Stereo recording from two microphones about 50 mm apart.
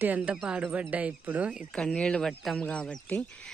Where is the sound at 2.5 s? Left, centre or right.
Centre.